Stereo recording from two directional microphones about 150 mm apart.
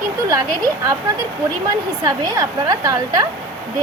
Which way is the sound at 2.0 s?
25° right (ahead or behind).